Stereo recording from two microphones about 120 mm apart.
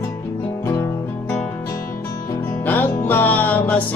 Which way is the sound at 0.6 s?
25° left (ahead or behind).